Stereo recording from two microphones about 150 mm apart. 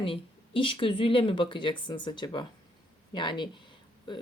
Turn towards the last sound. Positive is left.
turn(degrees=30)  # may be behind; listen again after turning